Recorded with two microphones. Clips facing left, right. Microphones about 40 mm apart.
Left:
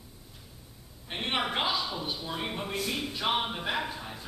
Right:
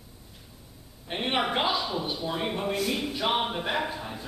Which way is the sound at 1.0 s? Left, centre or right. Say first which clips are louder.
Right 3 dB; centre.